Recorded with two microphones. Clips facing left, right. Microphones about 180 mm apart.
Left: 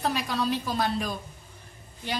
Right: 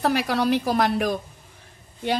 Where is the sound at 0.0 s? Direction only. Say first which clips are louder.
Right 6 dB; 70° right (ahead or behind).